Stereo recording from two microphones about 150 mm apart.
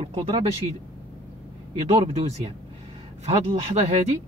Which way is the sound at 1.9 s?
45° right (ahead or behind).